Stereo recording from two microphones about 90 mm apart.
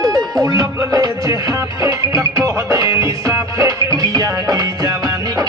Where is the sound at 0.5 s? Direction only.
40° right (ahead or behind).